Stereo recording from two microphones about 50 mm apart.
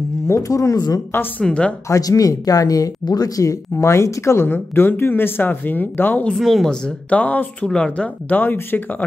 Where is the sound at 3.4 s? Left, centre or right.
Left.